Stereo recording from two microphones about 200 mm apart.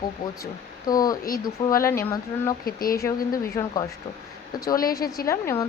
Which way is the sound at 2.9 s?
15° left (ahead or behind).